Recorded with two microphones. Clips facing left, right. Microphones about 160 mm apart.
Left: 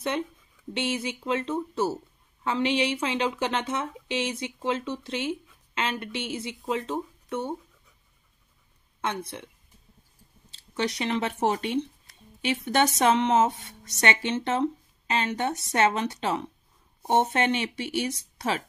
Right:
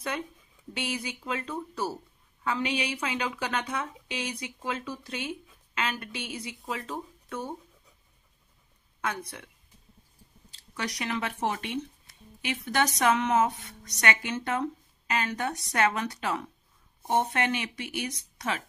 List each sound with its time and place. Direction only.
0.7 s speech: 25° left (ahead or behind)
9.0 s speech: 25° left (ahead or behind)
10.5 s speech: 25° left (ahead or behind)